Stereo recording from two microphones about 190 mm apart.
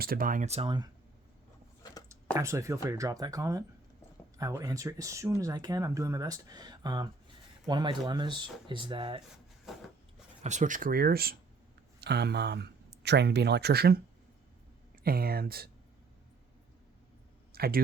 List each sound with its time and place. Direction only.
0.0 s speech: 50° right (ahead or behind); by 0.9 s 25° right (ahead or behind)
2.3 s speech: 15° right (ahead or behind)
10.4 s speech: 40° right (ahead or behind); by 14.0 s 55° right (ahead or behind)
15.0 s speech: 50° right (ahead or behind)
17.5 s a sound: 50° right (ahead or behind)